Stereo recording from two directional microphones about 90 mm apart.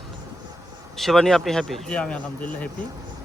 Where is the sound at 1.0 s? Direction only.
5° left (ahead or behind).